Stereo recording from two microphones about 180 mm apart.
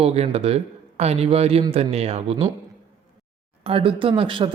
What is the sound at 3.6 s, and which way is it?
Speech, 30° right (ahead or behind).